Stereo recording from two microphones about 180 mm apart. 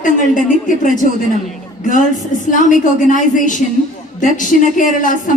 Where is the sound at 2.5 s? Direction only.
45° left (ahead or behind).